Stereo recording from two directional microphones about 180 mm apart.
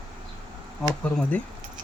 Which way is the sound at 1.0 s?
5° left (ahead or behind).